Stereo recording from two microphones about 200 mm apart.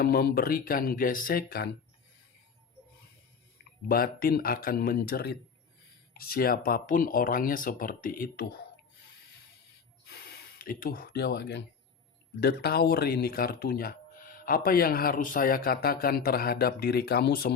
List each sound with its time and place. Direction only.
0.0 s speech: 50° left (ahead or behind)
3.8 s speech: 45° left (ahead or behind)
10.1 s a sound: 50° left (ahead or behind)
12.4 s speech: 55° left (ahead or behind)